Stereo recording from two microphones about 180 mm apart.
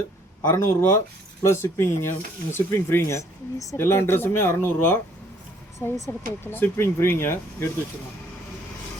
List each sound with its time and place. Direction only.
0.4 s speech: 15° left (ahead or behind)